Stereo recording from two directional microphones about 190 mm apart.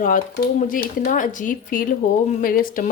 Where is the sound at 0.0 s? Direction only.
45° left (ahead or behind).